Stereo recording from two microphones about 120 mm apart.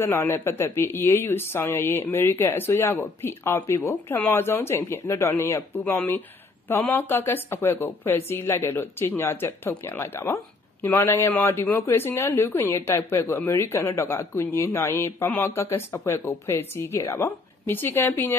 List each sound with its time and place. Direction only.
0.0 s speech: 20° left (ahead or behind)